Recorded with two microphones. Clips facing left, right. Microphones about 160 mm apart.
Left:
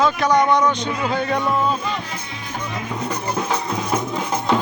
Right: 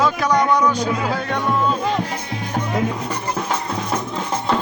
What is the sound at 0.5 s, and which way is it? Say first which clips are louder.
Speech: right 1 dB; 10° right (ahead or behind).